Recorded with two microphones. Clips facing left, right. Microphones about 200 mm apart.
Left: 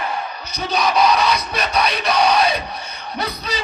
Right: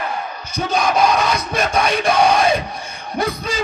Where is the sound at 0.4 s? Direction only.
50° right (ahead or behind).